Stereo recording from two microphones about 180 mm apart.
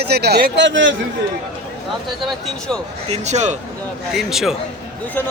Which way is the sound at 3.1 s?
40° right (ahead or behind).